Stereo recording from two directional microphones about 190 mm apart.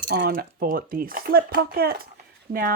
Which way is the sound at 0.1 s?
55° right (ahead or behind).